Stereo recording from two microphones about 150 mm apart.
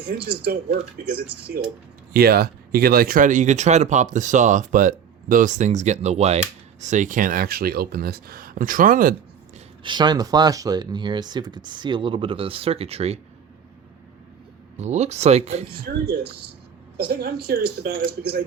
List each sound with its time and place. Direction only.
0.1 s speech: 90° right; by 9.1 s 65° right (ahead or behind)
9.8 s speech: 30° right (ahead or behind)
14.8 s speech: 50° right (ahead or behind)
15.9 s speech: 90° right